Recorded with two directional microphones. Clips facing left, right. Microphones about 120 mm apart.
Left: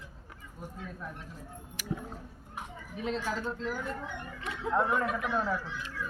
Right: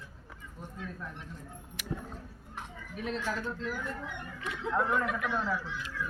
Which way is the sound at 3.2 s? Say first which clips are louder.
Left 1 dB; 20° left (ahead or behind).